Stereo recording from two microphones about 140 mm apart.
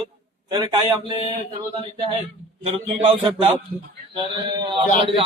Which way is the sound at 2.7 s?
40° right (ahead or behind).